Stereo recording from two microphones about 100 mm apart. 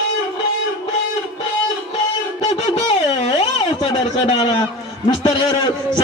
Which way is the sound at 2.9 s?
70° left (ahead or behind).